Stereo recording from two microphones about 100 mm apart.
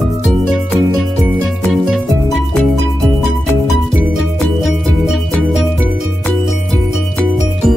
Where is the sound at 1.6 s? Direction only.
Centre (ahead or behind).